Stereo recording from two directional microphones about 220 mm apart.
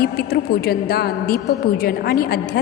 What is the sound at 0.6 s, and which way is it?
A woman's voice, 45° left (ahead or behind).